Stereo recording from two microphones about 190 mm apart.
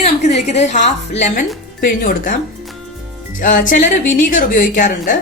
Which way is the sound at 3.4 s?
45° left (ahead or behind).